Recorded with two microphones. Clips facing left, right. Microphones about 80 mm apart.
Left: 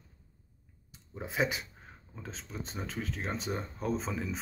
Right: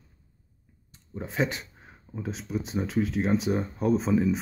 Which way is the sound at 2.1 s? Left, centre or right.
Centre.